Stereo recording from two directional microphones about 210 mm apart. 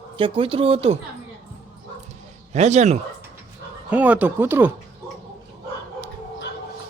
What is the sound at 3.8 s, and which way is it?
Speech, 5° right (ahead or behind).